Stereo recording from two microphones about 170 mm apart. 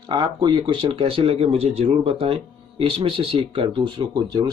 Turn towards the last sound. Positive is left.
turn(degrees=-25)  # may be behind; listen again after turning